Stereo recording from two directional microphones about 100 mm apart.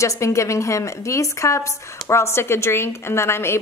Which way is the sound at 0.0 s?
30° left (ahead or behind).